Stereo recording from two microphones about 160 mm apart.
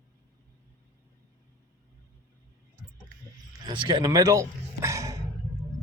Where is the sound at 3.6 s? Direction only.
30° right (ahead or behind).